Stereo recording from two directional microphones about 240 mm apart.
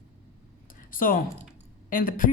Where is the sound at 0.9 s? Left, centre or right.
Left.